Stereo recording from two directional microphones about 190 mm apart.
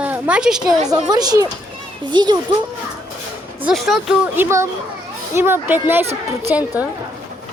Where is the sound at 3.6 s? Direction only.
Centre (ahead or behind).